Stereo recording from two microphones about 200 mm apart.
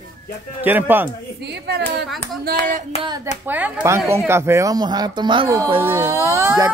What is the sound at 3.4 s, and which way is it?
A man's voice, 10° right (ahead or behind).